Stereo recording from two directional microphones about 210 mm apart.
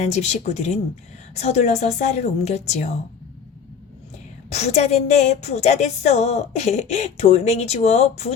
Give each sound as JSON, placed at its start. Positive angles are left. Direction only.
{"t": 0.0, "sound": "speech", "side_deg": 30}
{"t": 4.5, "sound": "speech", "side_deg": 30}